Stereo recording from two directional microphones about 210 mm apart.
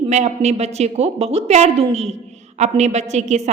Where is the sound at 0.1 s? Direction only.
30° right (ahead or behind).